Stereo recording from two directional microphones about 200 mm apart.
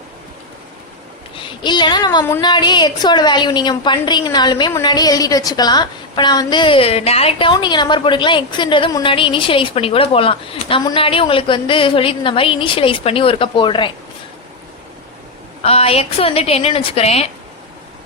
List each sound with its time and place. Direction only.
1.4 s a woman's voice: 25° left (ahead or behind)
15.6 s a woman's voice: 30° left (ahead or behind)